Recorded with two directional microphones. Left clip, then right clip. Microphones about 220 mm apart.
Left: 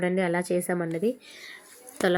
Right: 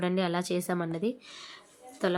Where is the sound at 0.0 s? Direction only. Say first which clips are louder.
Left 4 dB; centre (ahead or behind).